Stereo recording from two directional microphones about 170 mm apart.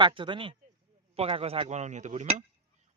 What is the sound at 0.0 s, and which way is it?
A man's voice, 30° right (ahead or behind).